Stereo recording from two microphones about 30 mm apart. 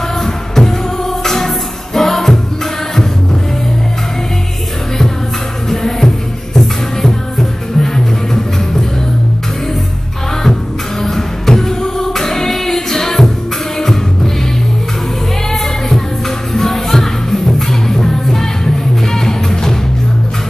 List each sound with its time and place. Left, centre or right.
0.2 s music: centre
5.7 s music: centre
11.0 s music: centre
15.5 s music: centre